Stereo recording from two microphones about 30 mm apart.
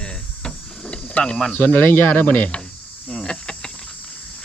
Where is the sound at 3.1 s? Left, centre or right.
Left.